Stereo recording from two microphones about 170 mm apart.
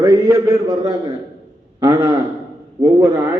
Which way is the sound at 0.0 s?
20° right (ahead or behind).